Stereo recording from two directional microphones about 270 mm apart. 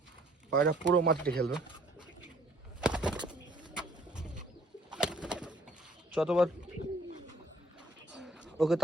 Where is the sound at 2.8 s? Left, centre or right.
Centre.